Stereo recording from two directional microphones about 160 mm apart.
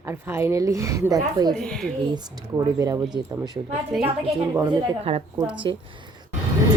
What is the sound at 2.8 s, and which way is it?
Speech, 20° right (ahead or behind).